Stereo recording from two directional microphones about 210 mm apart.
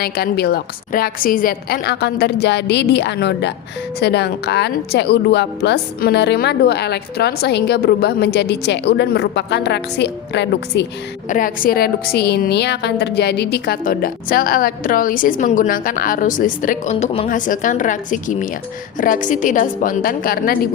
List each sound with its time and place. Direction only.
0.0 s a woman's voice: 50° left (ahead or behind)
11.3 s a woman's voice: 40° left (ahead or behind)